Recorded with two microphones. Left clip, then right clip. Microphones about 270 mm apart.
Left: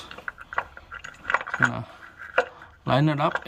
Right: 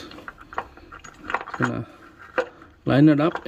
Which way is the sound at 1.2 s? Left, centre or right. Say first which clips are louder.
Left 2 dB; centre.